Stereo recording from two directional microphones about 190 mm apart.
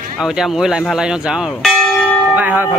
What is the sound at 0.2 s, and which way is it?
Speech, centre (ahead or behind).